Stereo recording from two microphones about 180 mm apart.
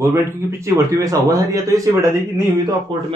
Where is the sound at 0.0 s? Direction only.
15° right (ahead or behind).